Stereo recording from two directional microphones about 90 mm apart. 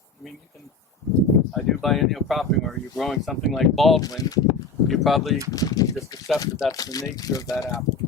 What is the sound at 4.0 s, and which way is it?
Speech, 45° left (ahead or behind).